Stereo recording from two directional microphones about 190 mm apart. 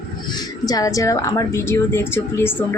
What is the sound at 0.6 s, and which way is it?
A woman's voice, 20° left (ahead or behind).